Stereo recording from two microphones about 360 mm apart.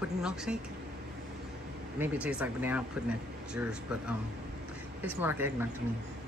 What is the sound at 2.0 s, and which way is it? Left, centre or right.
Speech, centre.